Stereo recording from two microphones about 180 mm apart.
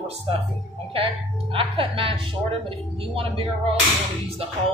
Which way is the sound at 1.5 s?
30° right (ahead or behind).